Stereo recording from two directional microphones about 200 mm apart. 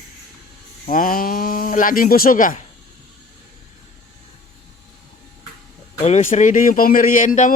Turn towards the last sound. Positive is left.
turn(degrees=40)  # may be behind; listen again after turning